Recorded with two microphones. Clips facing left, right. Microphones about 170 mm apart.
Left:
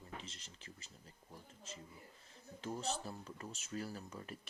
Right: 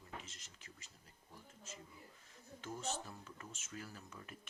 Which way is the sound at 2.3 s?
30° left (ahead or behind).